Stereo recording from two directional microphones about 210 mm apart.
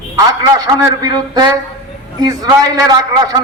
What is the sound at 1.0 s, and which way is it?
A man's voice, 20° right (ahead or behind).